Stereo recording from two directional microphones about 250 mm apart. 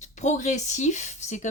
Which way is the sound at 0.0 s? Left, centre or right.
Left.